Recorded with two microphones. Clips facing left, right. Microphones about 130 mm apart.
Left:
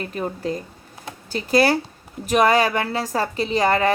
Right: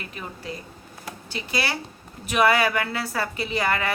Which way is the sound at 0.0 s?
40° left (ahead or behind).